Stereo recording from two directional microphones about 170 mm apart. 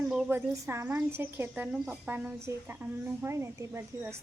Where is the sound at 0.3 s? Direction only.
15° right (ahead or behind).